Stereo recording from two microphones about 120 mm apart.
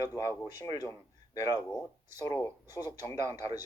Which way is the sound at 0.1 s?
25° left (ahead or behind).